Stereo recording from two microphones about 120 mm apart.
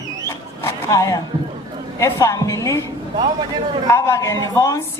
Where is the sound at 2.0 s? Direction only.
25° left (ahead or behind).